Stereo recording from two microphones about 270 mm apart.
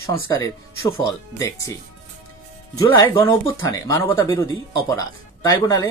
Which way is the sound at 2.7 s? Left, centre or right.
Centre.